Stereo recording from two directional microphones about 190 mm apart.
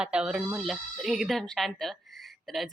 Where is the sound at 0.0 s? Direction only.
5° right (ahead or behind).